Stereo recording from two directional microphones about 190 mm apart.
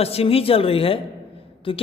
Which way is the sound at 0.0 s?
30° left (ahead or behind).